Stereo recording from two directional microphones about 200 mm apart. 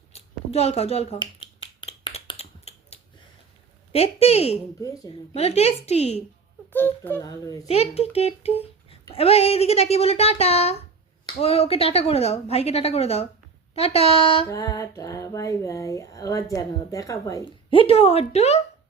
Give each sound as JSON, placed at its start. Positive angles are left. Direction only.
{"t": 0.1, "sound": "finger snapping", "side_deg": 30}
{"t": 3.9, "sound": "a woman's voice", "side_deg": 30}
{"t": 4.8, "sound": "speech", "side_deg": 15}
{"t": 5.3, "sound": "a woman's voice", "side_deg": 30}
{"t": 6.7, "sound": "speech", "side_deg": 10}
{"t": 7.7, "sound": "a woman's voice", "side_deg": 30}
{"t": 14.4, "sound": "speech", "side_deg": 15}
{"t": 17.7, "sound": "a woman's voice", "side_deg": 25}